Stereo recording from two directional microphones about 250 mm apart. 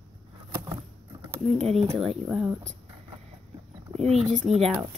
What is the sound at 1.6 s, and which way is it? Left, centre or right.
Speech, right.